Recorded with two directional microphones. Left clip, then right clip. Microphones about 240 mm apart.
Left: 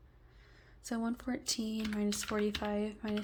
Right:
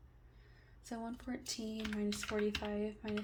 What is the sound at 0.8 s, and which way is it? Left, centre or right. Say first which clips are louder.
A woman's voice: left 7 dB; left.